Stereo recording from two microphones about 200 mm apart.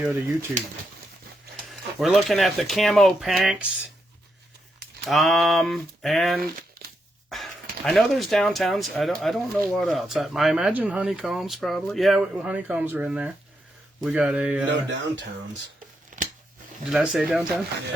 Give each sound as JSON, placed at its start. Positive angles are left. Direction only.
{"t": 0.0, "sound": "speech", "side_deg": -10}
{"t": 2.0, "sound": "speech", "side_deg": 0}
{"t": 5.0, "sound": "speech", "side_deg": 0}
{"t": 6.4, "sound": "crumpling", "side_deg": -50}
{"t": 7.3, "sound": "speech", "side_deg": 0}
{"t": 16.0, "sound": "a sound", "side_deg": -40}
{"t": 16.9, "sound": "speech", "side_deg": -5}